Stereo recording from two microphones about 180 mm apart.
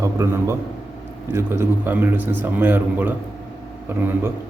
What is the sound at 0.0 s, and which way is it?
A man's voice, 15° right (ahead or behind).